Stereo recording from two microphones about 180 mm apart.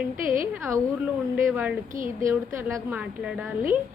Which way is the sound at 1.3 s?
10° right (ahead or behind).